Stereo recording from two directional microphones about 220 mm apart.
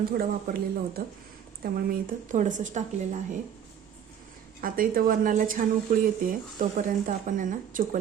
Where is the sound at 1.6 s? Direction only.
40° right (ahead or behind).